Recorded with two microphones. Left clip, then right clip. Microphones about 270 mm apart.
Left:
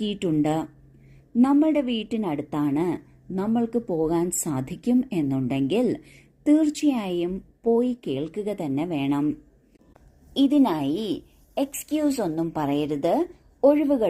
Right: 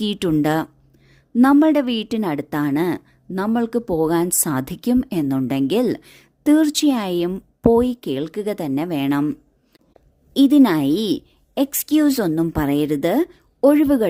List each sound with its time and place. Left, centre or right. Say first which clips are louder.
0.0 s a woman's voice: right 5 dB; right